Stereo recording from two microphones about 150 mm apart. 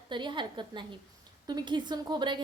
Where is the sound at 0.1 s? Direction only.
30° right (ahead or behind).